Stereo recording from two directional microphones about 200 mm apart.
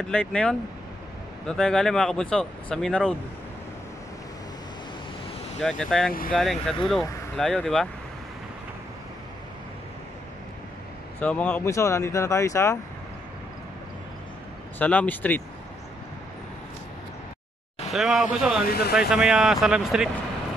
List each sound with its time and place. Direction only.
0.0 s speech: 5° left (ahead or behind)
5.6 s speech: centre (ahead or behind)
11.1 s speech: 5° left (ahead or behind)
14.8 s speech: 10° left (ahead or behind)
17.9 s speech: centre (ahead or behind)
18.7 s speech: 50° left (ahead or behind)
18.9 s speech: 5° right (ahead or behind)